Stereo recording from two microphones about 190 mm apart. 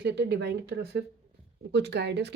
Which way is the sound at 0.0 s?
60° right (ahead or behind).